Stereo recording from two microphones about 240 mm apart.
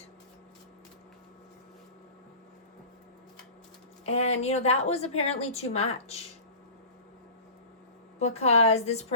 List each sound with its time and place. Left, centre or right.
4.0 s a woman's voice: left
8.2 s a woman's voice: left